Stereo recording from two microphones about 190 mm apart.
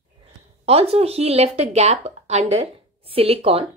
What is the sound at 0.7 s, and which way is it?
A woman's voice, 30° right (ahead or behind).